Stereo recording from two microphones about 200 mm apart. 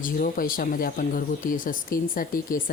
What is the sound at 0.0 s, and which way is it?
Speech, 45° left (ahead or behind).